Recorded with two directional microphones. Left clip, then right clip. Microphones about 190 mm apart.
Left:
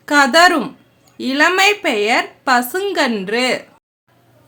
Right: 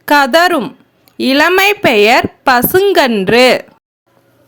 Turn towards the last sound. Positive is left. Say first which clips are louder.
# right 10 dB
turn(degrees=-40)  # may be behind; listen again after turning